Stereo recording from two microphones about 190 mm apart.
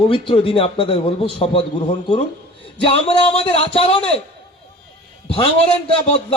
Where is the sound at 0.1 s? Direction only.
30° left (ahead or behind).